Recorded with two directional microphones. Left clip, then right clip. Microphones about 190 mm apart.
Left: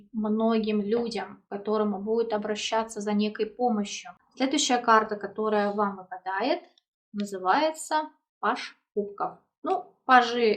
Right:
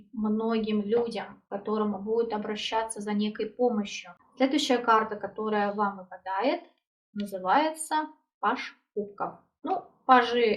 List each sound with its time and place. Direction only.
0.2 s speech: 30° left (ahead or behind)
10.1 s speech: 25° left (ahead or behind)